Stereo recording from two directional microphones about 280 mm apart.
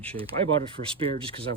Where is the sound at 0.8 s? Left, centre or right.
Right.